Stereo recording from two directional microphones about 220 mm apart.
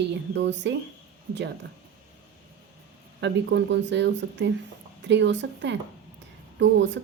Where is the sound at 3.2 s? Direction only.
50° right (ahead or behind).